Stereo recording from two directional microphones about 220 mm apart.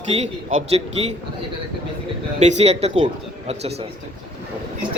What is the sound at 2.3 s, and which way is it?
Speech, 30° right (ahead or behind).